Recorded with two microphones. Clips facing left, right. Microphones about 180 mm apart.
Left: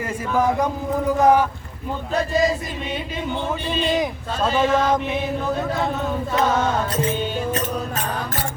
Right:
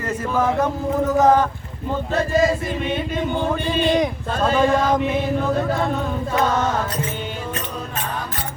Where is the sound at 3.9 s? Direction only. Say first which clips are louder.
Right 3 dB; centre (ahead or behind).